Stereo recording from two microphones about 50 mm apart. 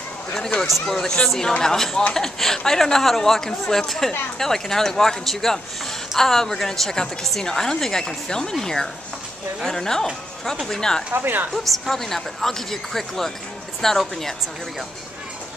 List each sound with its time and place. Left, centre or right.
0.8 s a woman's voice: centre
11.1 s speech: right
11.5 s a woman's voice: centre